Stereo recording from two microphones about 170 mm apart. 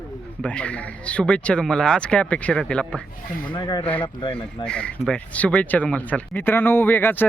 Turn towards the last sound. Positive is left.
turn(degrees=10)  # may be behind; listen again after turning